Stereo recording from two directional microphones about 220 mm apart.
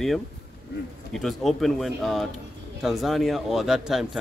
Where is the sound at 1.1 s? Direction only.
Centre (ahead or behind).